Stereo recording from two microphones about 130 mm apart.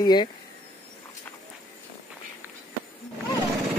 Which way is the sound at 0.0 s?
35° left (ahead or behind).